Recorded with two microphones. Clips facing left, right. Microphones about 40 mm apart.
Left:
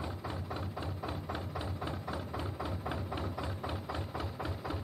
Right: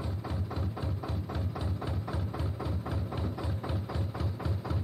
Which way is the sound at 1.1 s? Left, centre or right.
Centre.